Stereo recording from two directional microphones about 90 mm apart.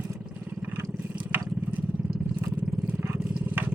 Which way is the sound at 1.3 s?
25° right (ahead or behind).